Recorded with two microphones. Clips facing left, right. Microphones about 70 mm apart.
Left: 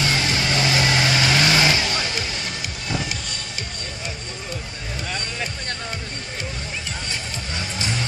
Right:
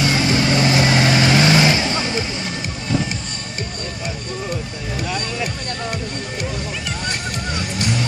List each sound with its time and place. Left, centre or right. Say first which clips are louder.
0.0 s vehicle: right 5 dB; centre
1.8 s vehicle: right 4 dB; right